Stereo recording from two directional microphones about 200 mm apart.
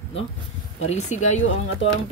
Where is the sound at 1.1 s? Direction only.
90° left.